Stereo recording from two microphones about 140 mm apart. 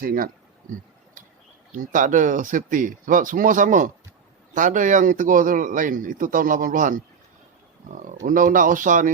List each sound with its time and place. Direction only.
0.0 s speech: 90° right
1.7 s speech: 70° right (ahead or behind)
8.3 s speech: 70° right (ahead or behind)